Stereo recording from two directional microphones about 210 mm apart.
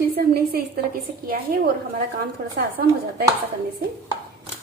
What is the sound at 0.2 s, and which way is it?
Speech, 45° right (ahead or behind).